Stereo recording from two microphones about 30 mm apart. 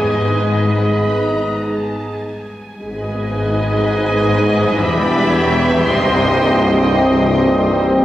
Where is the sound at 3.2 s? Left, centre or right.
Centre.